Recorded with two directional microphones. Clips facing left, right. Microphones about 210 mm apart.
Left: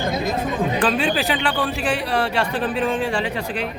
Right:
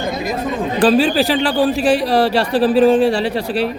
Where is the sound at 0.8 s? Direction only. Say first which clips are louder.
Right 11 dB; 35° right (ahead or behind).